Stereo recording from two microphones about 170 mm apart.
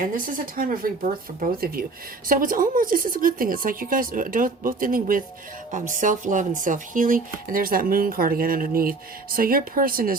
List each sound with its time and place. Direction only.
0.0 s speech: 55° right (ahead or behind)